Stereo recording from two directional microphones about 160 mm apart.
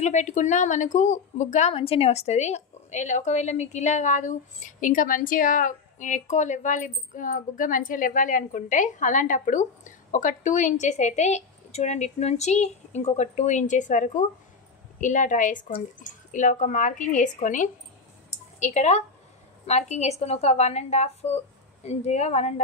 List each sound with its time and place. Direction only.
0.0 s a woman's voice: 50° left (ahead or behind)